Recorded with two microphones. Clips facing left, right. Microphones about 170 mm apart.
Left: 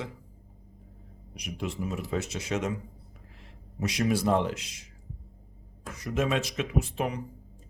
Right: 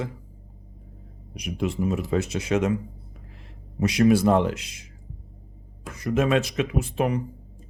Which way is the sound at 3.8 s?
60° right (ahead or behind).